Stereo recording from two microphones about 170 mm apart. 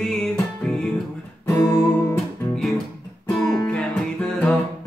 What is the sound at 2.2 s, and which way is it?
Music, centre (ahead or behind).